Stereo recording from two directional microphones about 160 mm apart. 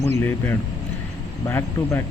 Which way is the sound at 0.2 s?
10° left (ahead or behind).